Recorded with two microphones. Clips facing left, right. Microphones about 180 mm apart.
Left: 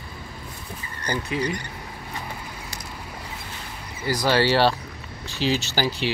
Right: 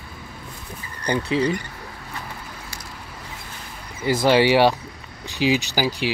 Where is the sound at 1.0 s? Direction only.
30° right (ahead or behind).